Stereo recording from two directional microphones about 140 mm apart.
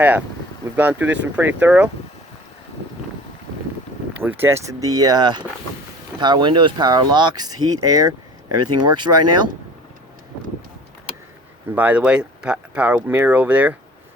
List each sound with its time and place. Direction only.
0.0 s speech: 10° right (ahead or behind)
4.2 s speech: 15° right (ahead or behind); by 9.4 s 30° right (ahead or behind)
11.7 s speech: 10° right (ahead or behind)